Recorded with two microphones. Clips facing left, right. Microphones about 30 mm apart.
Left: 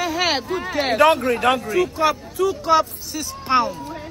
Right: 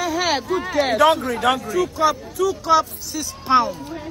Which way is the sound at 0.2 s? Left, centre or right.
Left.